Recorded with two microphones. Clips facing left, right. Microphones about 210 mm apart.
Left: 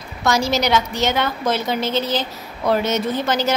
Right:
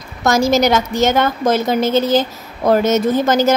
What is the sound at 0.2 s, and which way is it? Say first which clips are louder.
A woman's voice: right 6 dB; 45° right (ahead or behind).